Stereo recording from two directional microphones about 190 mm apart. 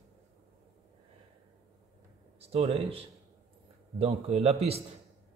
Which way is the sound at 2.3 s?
30° right (ahead or behind).